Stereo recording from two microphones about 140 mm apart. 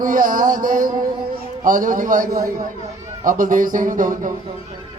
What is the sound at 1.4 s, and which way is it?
A man's voice, 80° right.